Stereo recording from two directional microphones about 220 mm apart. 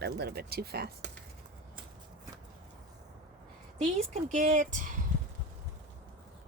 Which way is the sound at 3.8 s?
30° right (ahead or behind).